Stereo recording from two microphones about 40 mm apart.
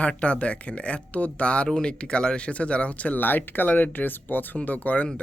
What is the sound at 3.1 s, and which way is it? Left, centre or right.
Speech, left.